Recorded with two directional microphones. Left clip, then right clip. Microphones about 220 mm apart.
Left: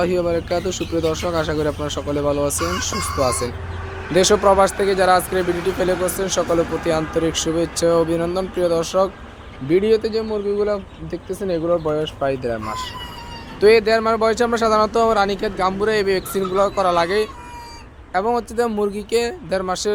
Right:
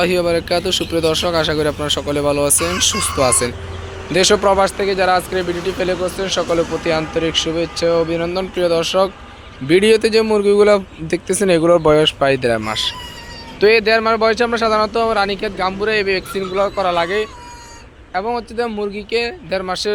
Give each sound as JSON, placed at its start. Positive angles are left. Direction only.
{"t": 0.0, "sound": "speech", "side_deg": 0}
{"t": 9.6, "sound": "speech", "side_deg": -10}
{"t": 13.6, "sound": "speech", "side_deg": 0}